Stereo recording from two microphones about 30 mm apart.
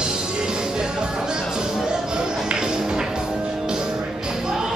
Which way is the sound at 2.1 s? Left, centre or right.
Right.